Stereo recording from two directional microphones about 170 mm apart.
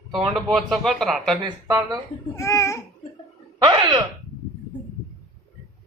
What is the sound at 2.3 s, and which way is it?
Speech, 15° left (ahead or behind).